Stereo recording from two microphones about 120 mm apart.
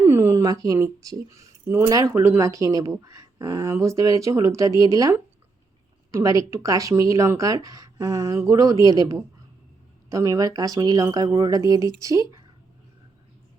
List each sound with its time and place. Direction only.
0.0 s a woman's voice: 20° right (ahead or behind)